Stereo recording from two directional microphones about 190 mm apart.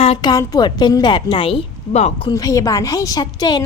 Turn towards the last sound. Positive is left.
turn(degrees=20)  # may be behind; listen again after turning